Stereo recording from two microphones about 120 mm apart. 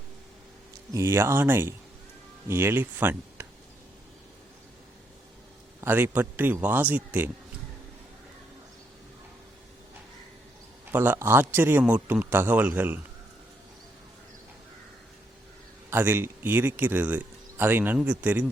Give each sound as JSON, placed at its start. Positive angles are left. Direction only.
{"t": 0.9, "sound": "speech", "side_deg": -20}
{"t": 5.8, "sound": "speech", "side_deg": -15}
{"t": 10.9, "sound": "speech", "side_deg": -15}
{"t": 15.9, "sound": "speech", "side_deg": -20}